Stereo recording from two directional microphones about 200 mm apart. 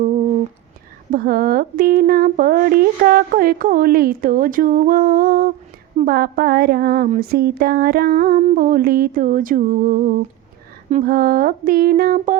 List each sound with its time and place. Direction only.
1.1 s speech: 45° right (ahead or behind)